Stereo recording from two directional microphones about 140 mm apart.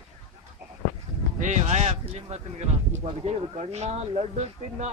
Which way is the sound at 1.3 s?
60° right (ahead or behind).